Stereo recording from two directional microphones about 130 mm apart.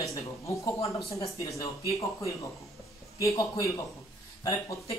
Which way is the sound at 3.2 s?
25° left (ahead or behind).